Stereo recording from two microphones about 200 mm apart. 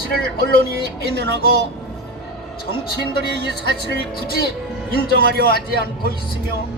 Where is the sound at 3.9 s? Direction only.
50° left (ahead or behind).